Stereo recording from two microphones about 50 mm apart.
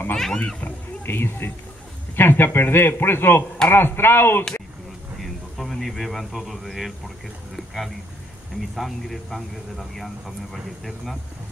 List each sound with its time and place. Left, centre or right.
0.1 s a child's voice: centre
0.6 s speech: left
5.2 s a sound: centre
8.7 s speech: centre